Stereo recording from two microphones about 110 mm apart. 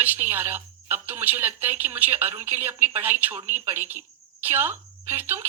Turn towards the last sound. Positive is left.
turn(degrees=-20)  # may be behind; listen again after turning